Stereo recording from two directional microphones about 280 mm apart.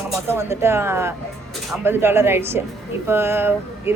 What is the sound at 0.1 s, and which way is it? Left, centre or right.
A woman's voice, centre.